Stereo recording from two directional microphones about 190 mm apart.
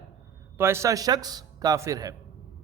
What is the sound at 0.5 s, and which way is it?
A man's voice, 15° right (ahead or behind).